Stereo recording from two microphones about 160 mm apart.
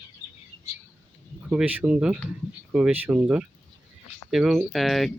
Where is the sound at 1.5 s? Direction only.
10° right (ahead or behind).